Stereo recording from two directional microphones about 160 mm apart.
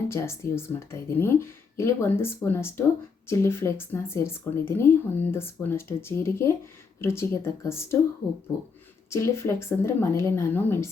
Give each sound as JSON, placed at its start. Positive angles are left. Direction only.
{"t": 0.1, "sound": "speech", "side_deg": 15}
{"t": 9.0, "sound": "speech", "side_deg": 15}